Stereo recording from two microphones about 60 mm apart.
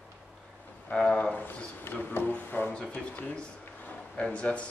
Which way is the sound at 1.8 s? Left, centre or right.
Left.